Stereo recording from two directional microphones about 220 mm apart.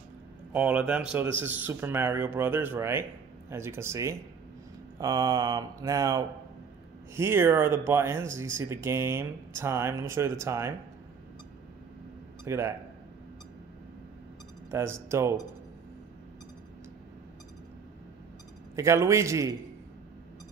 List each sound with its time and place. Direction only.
0.5 s speech: 5° right (ahead or behind)
12.4 s speech: 10° right (ahead or behind)
14.7 s speech: 10° right (ahead or behind)
18.8 s speech: 15° right (ahead or behind)